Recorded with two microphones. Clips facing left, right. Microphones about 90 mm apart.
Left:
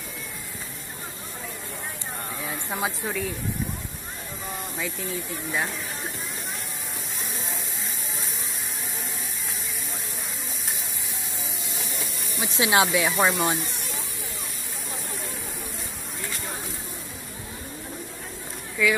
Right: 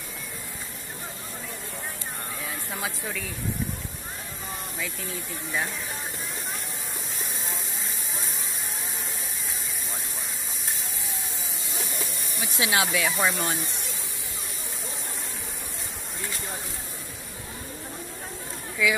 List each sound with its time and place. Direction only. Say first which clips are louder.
2.4 s a sound: left 5 dB; 25° left (ahead or behind)
12.5 s speech: left 4 dB; 30° left (ahead or behind)
18.8 s speech: left 2 dB; 10° right (ahead or behind)